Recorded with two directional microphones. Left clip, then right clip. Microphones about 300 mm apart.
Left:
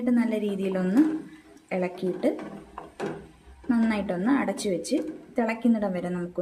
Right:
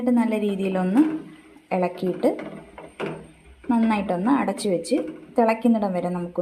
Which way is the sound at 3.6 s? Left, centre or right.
Centre.